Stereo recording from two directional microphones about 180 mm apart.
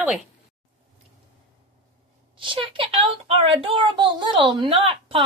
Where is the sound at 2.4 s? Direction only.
30° right (ahead or behind).